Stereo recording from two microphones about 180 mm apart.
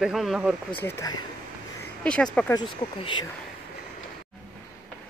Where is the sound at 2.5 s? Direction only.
25° left (ahead or behind).